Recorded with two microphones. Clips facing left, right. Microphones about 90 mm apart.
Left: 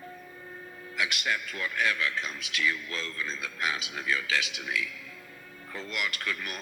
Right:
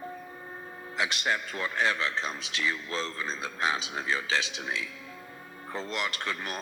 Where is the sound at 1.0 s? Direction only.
30° right (ahead or behind).